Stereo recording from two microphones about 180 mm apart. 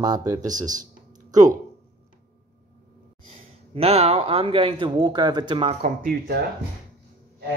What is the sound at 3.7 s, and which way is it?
Speech, 35° right (ahead or behind).